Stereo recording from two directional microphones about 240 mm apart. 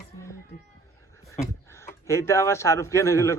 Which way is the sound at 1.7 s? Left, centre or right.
Centre.